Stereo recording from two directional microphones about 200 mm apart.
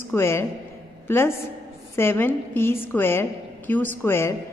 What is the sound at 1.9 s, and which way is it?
A woman's voice, 10° left (ahead or behind).